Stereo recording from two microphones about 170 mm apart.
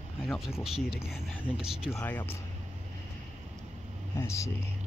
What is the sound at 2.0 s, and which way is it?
Speech, 10° left (ahead or behind).